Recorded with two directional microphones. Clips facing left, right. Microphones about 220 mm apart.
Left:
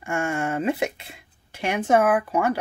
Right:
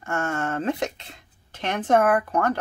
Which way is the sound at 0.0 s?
10° left (ahead or behind).